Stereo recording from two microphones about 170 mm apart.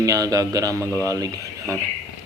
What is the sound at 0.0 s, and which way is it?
Speech, 20° right (ahead or behind).